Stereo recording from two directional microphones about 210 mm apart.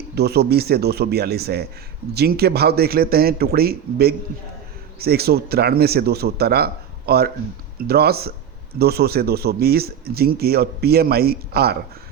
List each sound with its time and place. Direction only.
0.2 s speech: 50° right (ahead or behind)